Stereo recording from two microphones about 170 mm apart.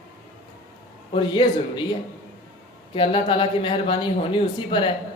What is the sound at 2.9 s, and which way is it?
Speech, 30° left (ahead or behind).